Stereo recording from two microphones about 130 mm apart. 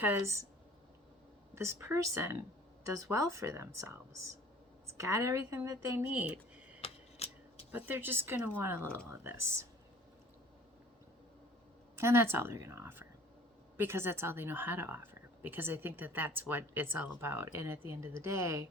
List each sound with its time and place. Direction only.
0.0 s speech: 20° right (ahead or behind)
1.5 s speech: 20° right (ahead or behind)
4.9 s speech: 20° right (ahead or behind)
6.1 s a sound: 10° right (ahead or behind)
6.8 s typewriter: 50° left (ahead or behind)
7.7 s a woman's voice: 15° right (ahead or behind)
11.9 s a woman's voice: 20° right (ahead or behind)